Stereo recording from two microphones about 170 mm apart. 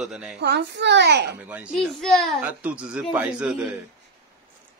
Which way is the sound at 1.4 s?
10° right (ahead or behind).